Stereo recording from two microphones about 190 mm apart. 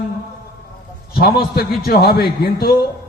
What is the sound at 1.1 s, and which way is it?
A man's voice, 50° left (ahead or behind).